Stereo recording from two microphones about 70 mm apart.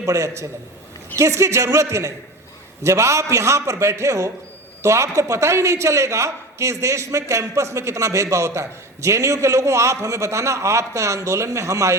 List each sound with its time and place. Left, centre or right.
0.0 s a man's voice: right